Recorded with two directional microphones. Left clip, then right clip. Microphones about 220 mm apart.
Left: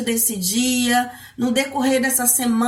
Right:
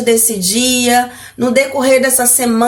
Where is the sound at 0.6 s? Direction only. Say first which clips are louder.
Right 7 dB; 10° right (ahead or behind).